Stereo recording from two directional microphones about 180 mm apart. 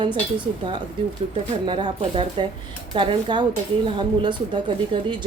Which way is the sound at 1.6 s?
25° right (ahead or behind).